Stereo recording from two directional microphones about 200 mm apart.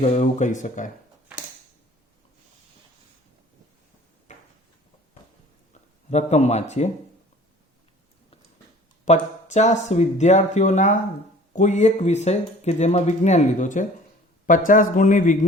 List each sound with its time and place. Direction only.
0.0 s speech: 35° left (ahead or behind)
4.3 s a sound: 35° left (ahead or behind)
6.1 s speech: 35° left (ahead or behind)
9.0 s speech: 35° left (ahead or behind)